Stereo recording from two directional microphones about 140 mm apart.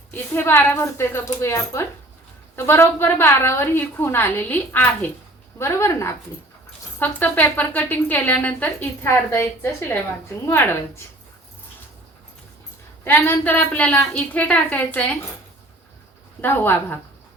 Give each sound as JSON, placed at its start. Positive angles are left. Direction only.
{"t": 0.1, "sound": "a woman's voice", "side_deg": 15}
{"t": 13.1, "sound": "a woman's voice", "side_deg": 15}
{"t": 16.4, "sound": "a woman's voice", "side_deg": 15}